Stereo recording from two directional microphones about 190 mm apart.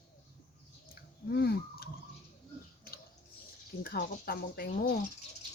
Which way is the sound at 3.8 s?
50° left (ahead or behind).